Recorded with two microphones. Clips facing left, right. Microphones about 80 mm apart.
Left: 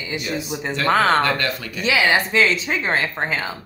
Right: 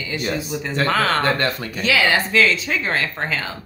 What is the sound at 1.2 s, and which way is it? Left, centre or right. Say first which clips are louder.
Speech: even; right.